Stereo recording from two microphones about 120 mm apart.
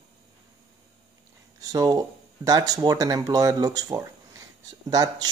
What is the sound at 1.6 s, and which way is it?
Speech, 30° right (ahead or behind).